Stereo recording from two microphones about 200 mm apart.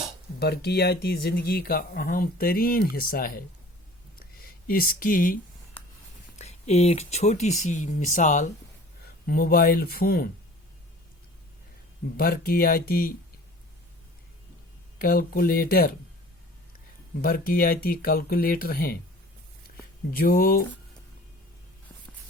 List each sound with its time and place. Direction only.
0.3 s speech: 55° left (ahead or behind)
4.6 s speech: 45° left (ahead or behind)
6.4 s speech: 30° left (ahead or behind); by 10.2 s 50° left (ahead or behind)
12.1 s speech: 45° left (ahead or behind)
14.9 s speech: 45° left (ahead or behind)
17.2 s speech: 45° left (ahead or behind)
20.1 s speech: 45° left (ahead or behind)